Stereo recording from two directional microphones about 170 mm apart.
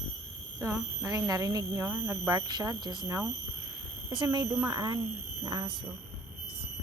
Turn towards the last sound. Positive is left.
turn(degrees=-20)  # may be behind; listen again after turning